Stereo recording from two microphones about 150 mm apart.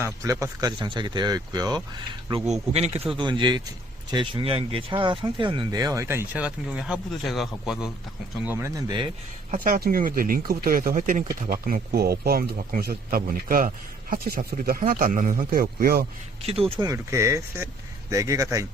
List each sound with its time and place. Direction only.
0.0 s speech: 20° right (ahead or behind)
2.5 s speech: 45° right (ahead or behind); by 7.9 s 5° right (ahead or behind)
8.4 s speech: 15° right (ahead or behind)
9.6 s speech: 70° right (ahead or behind)
16.4 s speech: 40° right (ahead or behind)
16.8 s speech: 20° right (ahead or behind)